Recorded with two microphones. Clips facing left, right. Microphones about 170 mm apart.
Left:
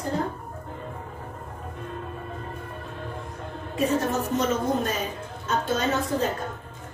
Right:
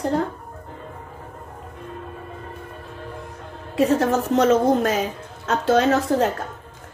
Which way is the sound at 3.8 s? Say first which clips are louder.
Right 6 dB; 90° right.